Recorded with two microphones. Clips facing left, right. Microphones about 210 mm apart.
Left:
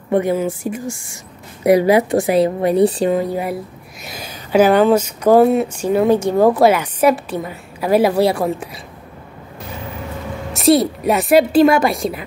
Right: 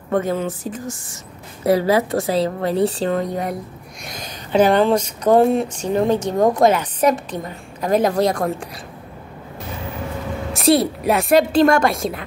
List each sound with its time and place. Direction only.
0.1 s speech: 10° left (ahead or behind)
10.5 s a woman's voice: centre (ahead or behind)